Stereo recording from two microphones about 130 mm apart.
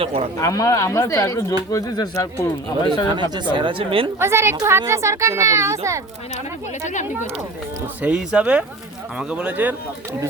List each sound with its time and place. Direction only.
0.0 s speech: 45° right (ahead or behind)
0.3 s speech: 25° left (ahead or behind)
3.1 s speech: 35° right (ahead or behind)
4.2 s speech: 20° right (ahead or behind)
8.0 s speech: 10° right (ahead or behind)